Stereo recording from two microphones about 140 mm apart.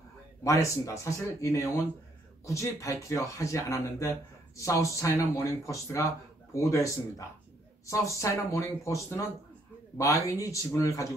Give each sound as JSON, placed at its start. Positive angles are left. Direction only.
{"t": 0.4, "sound": "speech", "side_deg": 20}